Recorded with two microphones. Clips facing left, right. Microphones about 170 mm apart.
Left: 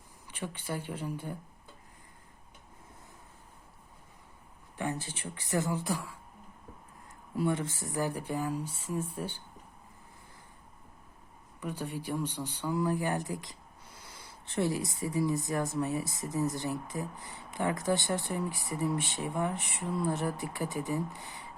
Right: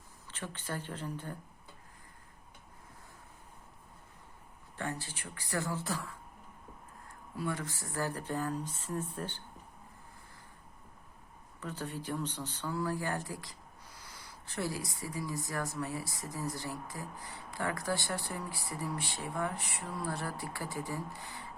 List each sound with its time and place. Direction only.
0.3 s speech: 15° left (ahead or behind)
4.8 s speech: 20° left (ahead or behind)
7.3 s speech: 25° left (ahead or behind)
11.6 s speech: 15° left (ahead or behind)